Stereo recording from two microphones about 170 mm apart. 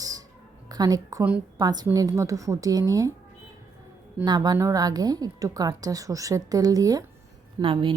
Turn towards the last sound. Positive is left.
turn(degrees=-30)  # may be behind; listen again after turning